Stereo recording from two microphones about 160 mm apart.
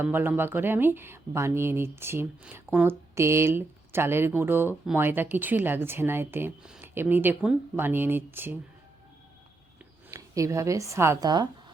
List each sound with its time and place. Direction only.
0.0 s speech: 10° right (ahead or behind)
10.1 s speech: 20° right (ahead or behind)